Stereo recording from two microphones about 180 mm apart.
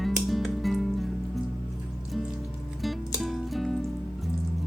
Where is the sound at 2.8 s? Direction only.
Centre (ahead or behind).